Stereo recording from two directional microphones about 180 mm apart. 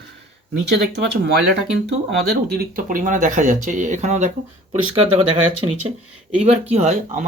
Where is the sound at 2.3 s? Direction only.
50° right (ahead or behind).